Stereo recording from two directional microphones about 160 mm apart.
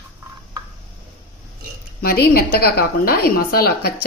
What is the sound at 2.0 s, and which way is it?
A woman's voice, 65° left (ahead or behind).